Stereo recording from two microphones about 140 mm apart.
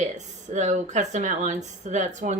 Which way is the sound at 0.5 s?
55° right (ahead or behind).